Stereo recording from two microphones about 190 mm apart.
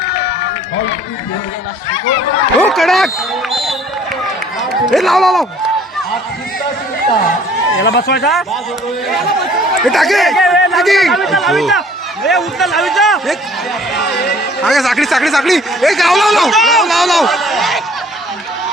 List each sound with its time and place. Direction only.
2.6 s speech: 5° left (ahead or behind)
3.5 s run: centre (ahead or behind)
4.7 s speech: centre (ahead or behind)
7.8 s speech: 60° left (ahead or behind)
9.8 s speech: centre (ahead or behind)
14.6 s speech: centre (ahead or behind)